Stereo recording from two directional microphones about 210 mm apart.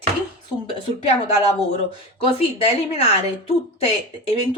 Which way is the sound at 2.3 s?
30° left (ahead or behind).